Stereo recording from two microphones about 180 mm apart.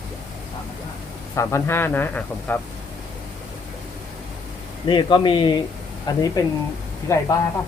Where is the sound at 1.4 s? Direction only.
15° left (ahead or behind).